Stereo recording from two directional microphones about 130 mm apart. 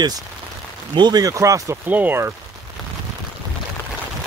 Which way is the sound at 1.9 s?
15° right (ahead or behind).